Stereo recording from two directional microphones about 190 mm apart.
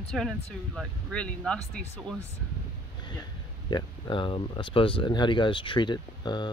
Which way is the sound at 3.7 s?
25° left (ahead or behind).